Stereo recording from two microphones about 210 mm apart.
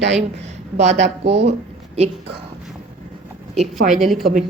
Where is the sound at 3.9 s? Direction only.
Centre (ahead or behind).